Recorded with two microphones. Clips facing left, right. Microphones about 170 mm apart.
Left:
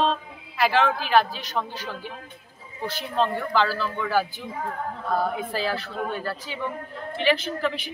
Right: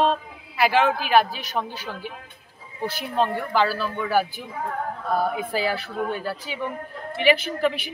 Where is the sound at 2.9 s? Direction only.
10° right (ahead or behind).